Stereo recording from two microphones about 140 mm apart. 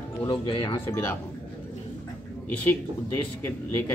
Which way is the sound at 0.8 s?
15° left (ahead or behind).